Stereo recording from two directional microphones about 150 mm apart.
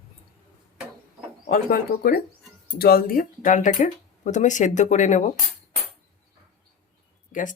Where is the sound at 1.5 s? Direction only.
90° left; by 5.3 s 55° left (ahead or behind).